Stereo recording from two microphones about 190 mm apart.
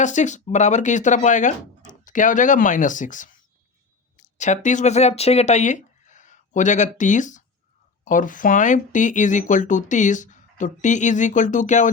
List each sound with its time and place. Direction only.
0.0 s speech: 40° left (ahead or behind)